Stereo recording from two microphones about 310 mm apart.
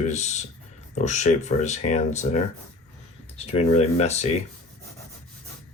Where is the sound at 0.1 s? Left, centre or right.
Left.